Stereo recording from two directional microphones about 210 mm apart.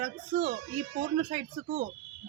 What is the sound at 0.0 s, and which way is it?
A man's voice, 30° right (ahead or behind).